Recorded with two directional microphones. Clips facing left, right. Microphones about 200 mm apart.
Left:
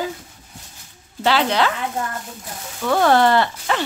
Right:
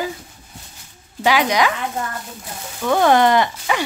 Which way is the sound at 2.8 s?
15° right (ahead or behind).